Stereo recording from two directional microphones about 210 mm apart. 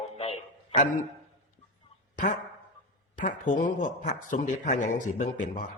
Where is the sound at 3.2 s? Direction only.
35° left (ahead or behind).